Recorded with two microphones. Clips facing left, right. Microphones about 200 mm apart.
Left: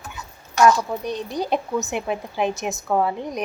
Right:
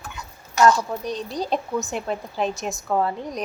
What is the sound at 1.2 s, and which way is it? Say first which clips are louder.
Speech: left 3 dB; 10° left (ahead or behind).